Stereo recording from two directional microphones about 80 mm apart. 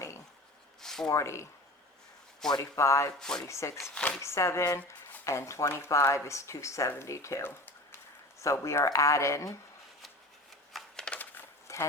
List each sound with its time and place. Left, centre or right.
0.8 s a sound: centre
1.0 s speech: left
2.6 s speech: left
3.2 s speech: centre
3.4 s speech: left
3.9 s speech: centre
4.2 s speech: left
10.7 s a sound: centre
11.7 s a sound: left